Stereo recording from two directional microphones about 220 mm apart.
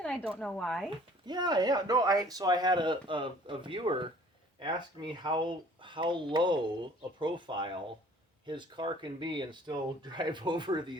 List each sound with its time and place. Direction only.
0.0 s speech: 5° left (ahead or behind)
1.3 s speech: 20° right (ahead or behind)